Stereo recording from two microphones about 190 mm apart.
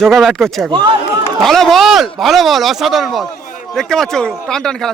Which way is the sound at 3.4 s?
40° left (ahead or behind).